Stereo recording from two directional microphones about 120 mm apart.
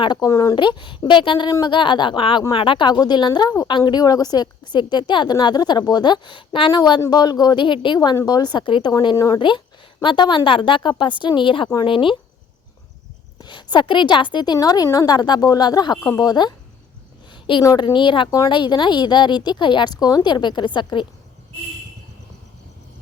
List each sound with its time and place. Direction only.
0.0 s a woman's voice: 40° left (ahead or behind)
0.3 s speech: 25° left (ahead or behind)
0.5 s a woman's voice: 40° left (ahead or behind)
7.9 s a woman's voice: 30° left (ahead or behind)
10.0 s a woman's voice: 40° left (ahead or behind)
13.4 s a woman's voice: 40° left (ahead or behind)
17.3 s a sound: 45° left (ahead or behind)
17.6 s a woman's voice: 30° left (ahead or behind)
18.3 s speech: 30° left (ahead or behind)
18.5 s a woman's voice: 40° left (ahead or behind)